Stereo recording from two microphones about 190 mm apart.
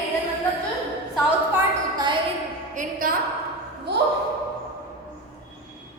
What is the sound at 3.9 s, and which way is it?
Speech, 60° right (ahead or behind).